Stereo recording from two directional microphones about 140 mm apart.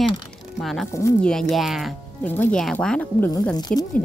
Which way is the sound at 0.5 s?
Centre (ahead or behind).